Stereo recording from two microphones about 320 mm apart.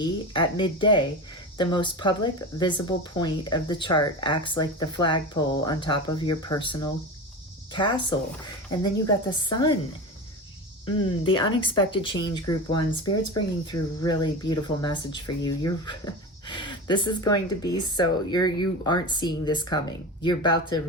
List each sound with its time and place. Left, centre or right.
0.0 s speech: centre
10.8 s speech: centre